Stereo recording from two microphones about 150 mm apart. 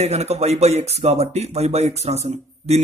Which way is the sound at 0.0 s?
45° right (ahead or behind).